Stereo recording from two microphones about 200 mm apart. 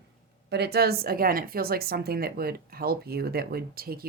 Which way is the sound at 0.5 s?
55° right (ahead or behind).